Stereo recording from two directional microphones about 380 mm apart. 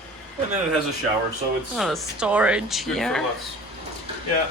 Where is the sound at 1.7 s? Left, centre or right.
Centre.